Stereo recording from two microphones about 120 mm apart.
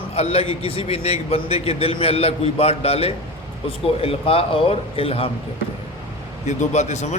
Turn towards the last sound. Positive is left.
turn(degrees=75)  # may be behind; listen again after turning